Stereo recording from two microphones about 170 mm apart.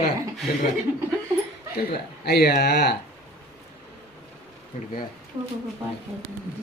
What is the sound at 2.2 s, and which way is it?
Speech, 70° left (ahead or behind).